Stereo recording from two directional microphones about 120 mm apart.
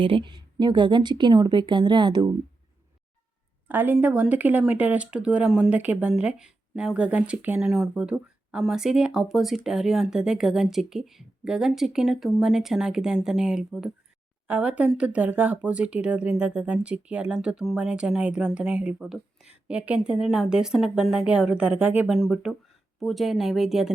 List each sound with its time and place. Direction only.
0.0 s speech: 45° right (ahead or behind)
3.7 s speech: 15° right (ahead or behind)
22.1 s speech: centre (ahead or behind)